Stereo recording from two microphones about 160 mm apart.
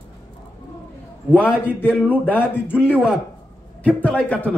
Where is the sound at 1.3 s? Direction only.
10° left (ahead or behind).